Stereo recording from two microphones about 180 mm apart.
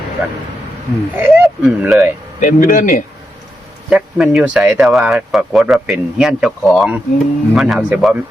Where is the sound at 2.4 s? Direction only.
45° left (ahead or behind).